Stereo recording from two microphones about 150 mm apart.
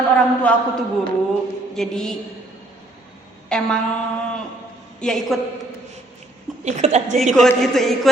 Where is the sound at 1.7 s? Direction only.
5° left (ahead or behind).